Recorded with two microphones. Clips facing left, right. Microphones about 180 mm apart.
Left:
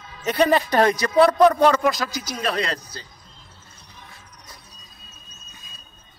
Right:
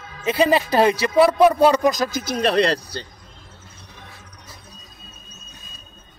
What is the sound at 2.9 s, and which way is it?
Speech, 70° right (ahead or behind).